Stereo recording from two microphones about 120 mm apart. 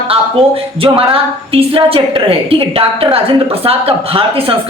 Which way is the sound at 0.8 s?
50° right (ahead or behind).